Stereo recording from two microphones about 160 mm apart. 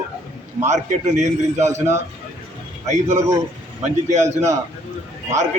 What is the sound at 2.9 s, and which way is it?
A man's voice, 45° right (ahead or behind).